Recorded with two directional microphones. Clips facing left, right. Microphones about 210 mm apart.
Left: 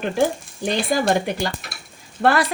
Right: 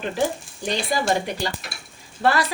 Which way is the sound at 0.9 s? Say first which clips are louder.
Left 3 dB; 50° left (ahead or behind).